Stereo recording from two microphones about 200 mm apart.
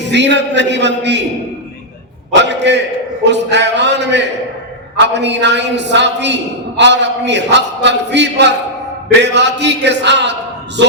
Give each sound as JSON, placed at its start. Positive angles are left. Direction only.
{"t": 0.0, "sound": "a man's voice", "side_deg": -60}
{"t": 2.4, "sound": "a man's voice", "side_deg": -60}